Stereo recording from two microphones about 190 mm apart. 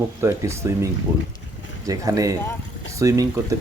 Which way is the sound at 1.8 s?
15° right (ahead or behind).